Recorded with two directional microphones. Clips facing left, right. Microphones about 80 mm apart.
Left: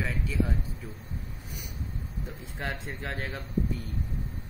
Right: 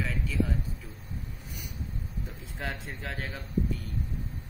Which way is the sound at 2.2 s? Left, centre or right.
Centre.